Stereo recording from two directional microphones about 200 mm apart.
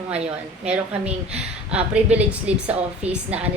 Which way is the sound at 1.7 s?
5° right (ahead or behind).